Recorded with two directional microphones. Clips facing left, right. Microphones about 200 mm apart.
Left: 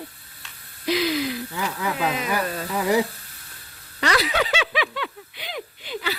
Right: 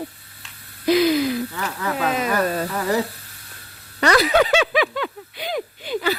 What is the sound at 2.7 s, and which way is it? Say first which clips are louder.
Speech: left 4 dB; 10° left (ahead or behind).